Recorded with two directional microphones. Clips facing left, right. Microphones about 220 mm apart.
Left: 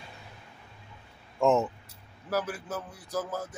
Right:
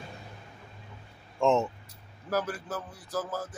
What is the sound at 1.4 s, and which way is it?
Speech, 5° left (ahead or behind).